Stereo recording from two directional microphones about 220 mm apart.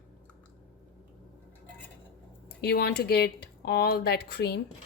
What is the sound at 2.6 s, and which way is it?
Speech, 45° left (ahead or behind).